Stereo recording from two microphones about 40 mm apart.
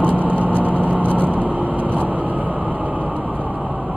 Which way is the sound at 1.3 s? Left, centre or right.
Right.